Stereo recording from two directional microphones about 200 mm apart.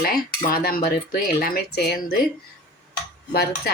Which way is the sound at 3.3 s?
50° left (ahead or behind).